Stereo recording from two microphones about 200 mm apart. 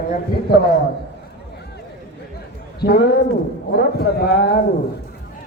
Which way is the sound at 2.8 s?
55° left (ahead or behind).